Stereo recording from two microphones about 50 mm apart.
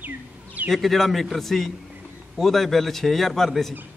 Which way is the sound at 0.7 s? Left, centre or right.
Centre.